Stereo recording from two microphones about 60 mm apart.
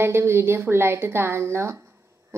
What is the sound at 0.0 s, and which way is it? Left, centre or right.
A woman's voice, right.